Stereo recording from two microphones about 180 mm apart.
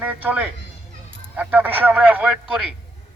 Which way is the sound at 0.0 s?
10° right (ahead or behind).